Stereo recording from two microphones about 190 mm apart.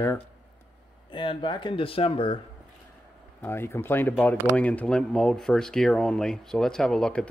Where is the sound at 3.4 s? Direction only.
10° left (ahead or behind).